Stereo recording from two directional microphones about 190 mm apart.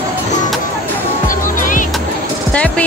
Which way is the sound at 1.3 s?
45° left (ahead or behind).